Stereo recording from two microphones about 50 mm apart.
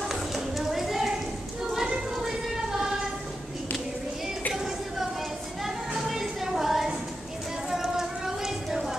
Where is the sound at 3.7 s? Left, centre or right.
Left.